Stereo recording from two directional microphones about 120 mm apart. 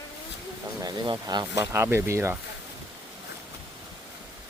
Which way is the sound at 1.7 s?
20° right (ahead or behind).